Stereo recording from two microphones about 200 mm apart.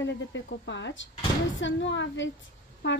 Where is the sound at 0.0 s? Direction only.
65° left (ahead or behind).